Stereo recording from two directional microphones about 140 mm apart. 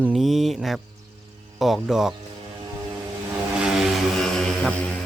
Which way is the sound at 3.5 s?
5° right (ahead or behind).